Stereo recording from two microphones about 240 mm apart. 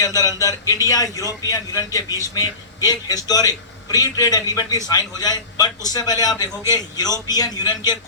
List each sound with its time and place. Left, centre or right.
0.0 s a man's voice: centre